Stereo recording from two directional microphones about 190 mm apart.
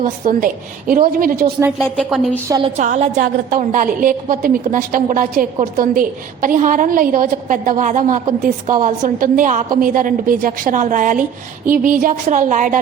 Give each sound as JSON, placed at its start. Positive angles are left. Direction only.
{"t": 0.0, "sound": "a woman's voice", "side_deg": -45}
{"t": 1.8, "sound": "speech", "side_deg": 0}
{"t": 2.7, "sound": "a woman's voice", "side_deg": -40}